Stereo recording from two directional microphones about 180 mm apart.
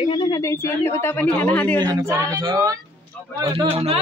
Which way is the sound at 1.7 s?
20° right (ahead or behind).